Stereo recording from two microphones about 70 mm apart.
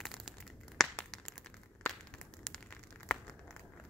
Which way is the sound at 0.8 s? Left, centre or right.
Centre.